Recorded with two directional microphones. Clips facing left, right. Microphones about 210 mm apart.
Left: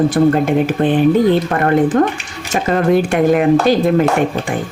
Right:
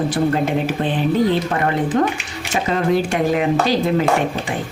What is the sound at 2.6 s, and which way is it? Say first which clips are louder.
Speech: left 5 dB; 55° left (ahead or behind).